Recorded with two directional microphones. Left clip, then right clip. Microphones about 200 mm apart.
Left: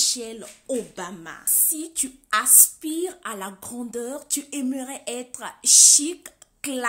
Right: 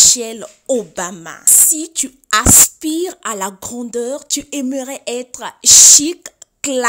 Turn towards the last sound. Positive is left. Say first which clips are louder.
# right 11 dB
turn(degrees=-45)  # may be behind; listen again after turning